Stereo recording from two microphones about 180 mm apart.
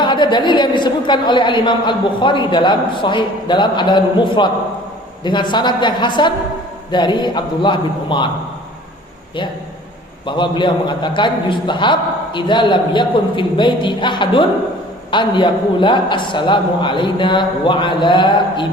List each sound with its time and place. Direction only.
0.0 s a woman's voice: 25° left (ahead or behind)
10.2 s a woman's voice: 25° left (ahead or behind)